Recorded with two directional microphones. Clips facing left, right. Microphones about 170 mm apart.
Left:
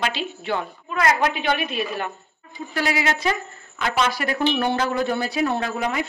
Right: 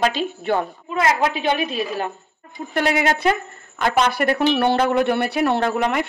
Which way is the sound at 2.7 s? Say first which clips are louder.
Right 4 dB; 55° right (ahead or behind).